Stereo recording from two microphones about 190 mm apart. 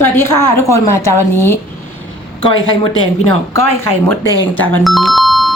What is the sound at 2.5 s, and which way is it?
Speech, 90° left.